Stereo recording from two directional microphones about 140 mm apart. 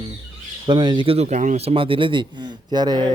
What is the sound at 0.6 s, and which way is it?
Speech, 30° right (ahead or behind).